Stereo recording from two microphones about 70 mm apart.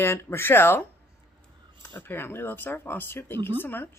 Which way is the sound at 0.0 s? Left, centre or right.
Left.